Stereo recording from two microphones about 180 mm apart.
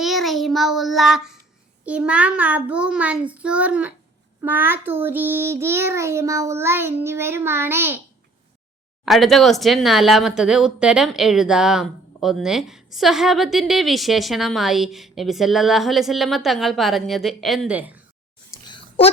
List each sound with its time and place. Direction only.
0.0 s child singing: centre (ahead or behind)
9.0 s speech: centre (ahead or behind)
18.7 s a sound: 30° left (ahead or behind)